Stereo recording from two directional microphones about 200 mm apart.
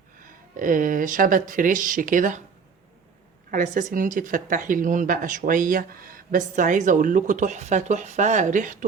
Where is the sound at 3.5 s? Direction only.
40° right (ahead or behind).